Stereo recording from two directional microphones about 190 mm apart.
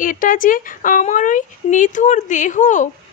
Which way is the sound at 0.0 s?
45° left (ahead or behind).